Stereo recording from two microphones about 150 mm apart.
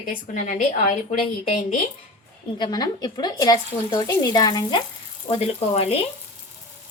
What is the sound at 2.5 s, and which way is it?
A woman's voice, 30° left (ahead or behind).